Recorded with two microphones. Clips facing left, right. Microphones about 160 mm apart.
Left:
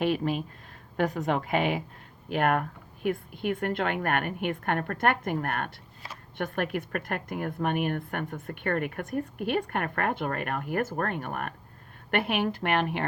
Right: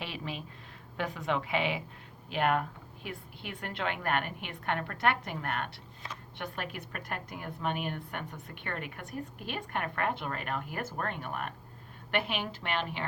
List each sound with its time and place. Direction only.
0.0 s a woman's voice: 50° left (ahead or behind)